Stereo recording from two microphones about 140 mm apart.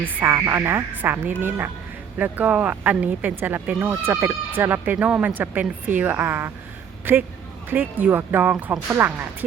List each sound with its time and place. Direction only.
0.0 s speech: 15° right (ahead or behind)